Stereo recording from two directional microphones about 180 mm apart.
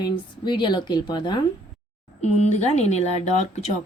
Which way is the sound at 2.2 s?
40° left (ahead or behind).